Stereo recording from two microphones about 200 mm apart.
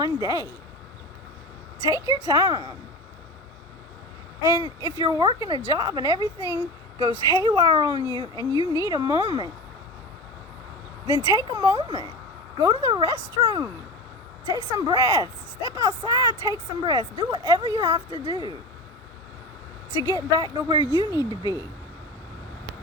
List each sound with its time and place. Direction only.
0.0 s speech: 20° right (ahead or behind)
1.9 s a woman's voice: 20° right (ahead or behind)
4.4 s a woman's voice: 15° right (ahead or behind)
11.0 s a woman's voice: 15° right (ahead or behind)
20.0 s speech: 15° right (ahead or behind)